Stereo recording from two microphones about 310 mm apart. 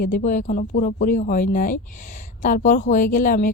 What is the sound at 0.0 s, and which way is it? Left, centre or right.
A woman's voice, left.